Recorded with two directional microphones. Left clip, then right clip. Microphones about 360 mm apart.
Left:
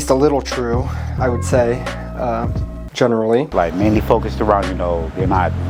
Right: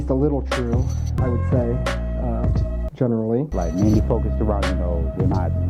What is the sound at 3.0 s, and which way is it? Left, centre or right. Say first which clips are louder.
Speech: left 8 dB; centre.